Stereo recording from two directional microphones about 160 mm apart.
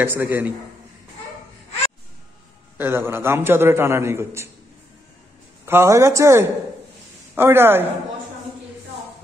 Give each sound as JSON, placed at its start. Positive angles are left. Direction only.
{"t": 0.0, "sound": "a man's voice", "side_deg": -10}
{"t": 2.8, "sound": "a man's voice", "side_deg": -15}
{"t": 5.7, "sound": "a man's voice", "side_deg": -15}